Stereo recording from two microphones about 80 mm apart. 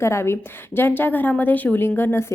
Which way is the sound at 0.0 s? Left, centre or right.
Left.